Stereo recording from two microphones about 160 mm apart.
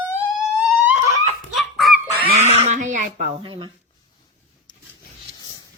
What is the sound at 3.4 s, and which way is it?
Speech, 35° right (ahead or behind).